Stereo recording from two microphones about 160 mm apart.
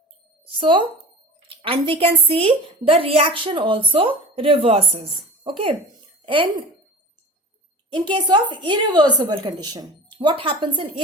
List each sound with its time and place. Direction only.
0.4 s a woman's voice: 30° right (ahead or behind)
7.9 s a woman's voice: 30° right (ahead or behind)